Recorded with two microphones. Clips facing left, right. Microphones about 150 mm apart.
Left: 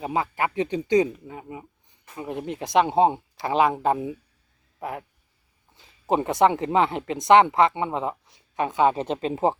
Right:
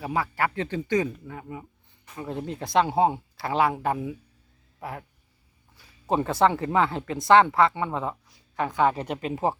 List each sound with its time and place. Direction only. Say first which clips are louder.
0.0 s speech: left 1 dB; 20° left (ahead or behind)